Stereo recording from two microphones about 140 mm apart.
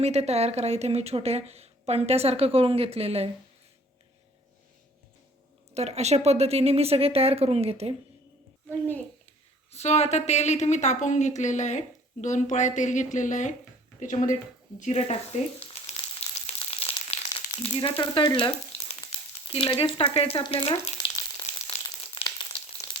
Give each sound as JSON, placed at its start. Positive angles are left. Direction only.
{"t": 0.0, "sound": "a woman's voice", "side_deg": -50}
{"t": 5.7, "sound": "a woman's voice", "side_deg": -50}
{"t": 9.7, "sound": "a woman's voice", "side_deg": 50}
{"t": 14.8, "sound": "speech", "side_deg": 55}
{"t": 16.5, "sound": "frying", "side_deg": 45}
{"t": 19.5, "sound": "speech", "side_deg": 40}
{"t": 21.0, "sound": "frying", "side_deg": 30}